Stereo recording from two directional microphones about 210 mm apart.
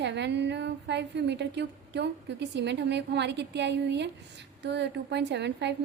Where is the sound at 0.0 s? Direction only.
55° right (ahead or behind).